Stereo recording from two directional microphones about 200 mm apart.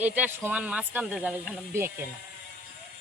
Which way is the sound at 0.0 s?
10° right (ahead or behind).